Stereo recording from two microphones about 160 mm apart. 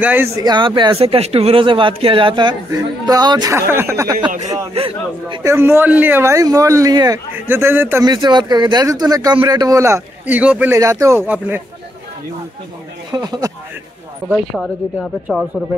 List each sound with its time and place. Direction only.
0.0 s speech: 10° right (ahead or behind)
0.4 s speech: 30° right (ahead or behind)
4.7 s speech: 35° right (ahead or behind)
5.4 s speech: 15° right (ahead or behind)
8.1 s speech: 30° right (ahead or behind); by 10.8 s 10° right (ahead or behind)
10.8 s speech: 20° right (ahead or behind)
13.1 s speech: 25° right (ahead or behind)